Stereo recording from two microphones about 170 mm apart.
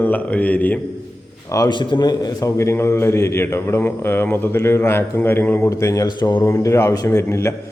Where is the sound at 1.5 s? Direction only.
25° left (ahead or behind).